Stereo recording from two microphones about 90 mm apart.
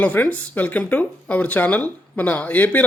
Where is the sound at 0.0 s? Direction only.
15° left (ahead or behind).